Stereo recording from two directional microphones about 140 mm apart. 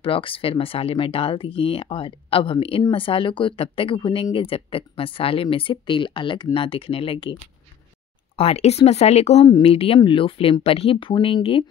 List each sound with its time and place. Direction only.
0.0 s speech: 40° left (ahead or behind)
8.4 s speech: 50° left (ahead or behind)